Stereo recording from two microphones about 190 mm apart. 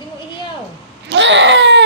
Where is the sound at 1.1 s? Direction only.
70° right (ahead or behind).